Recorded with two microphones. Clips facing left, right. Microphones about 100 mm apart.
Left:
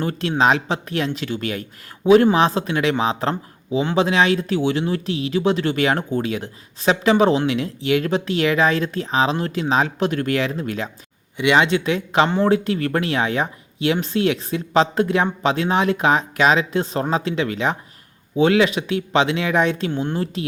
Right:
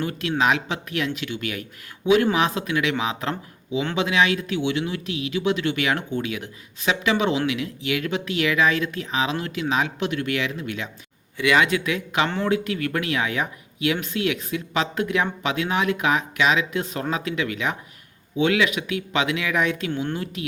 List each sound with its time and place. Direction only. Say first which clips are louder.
0.0 s speech: left 4 dB; 35° left (ahead or behind)
11.3 s speech: left 3 dB; 25° left (ahead or behind)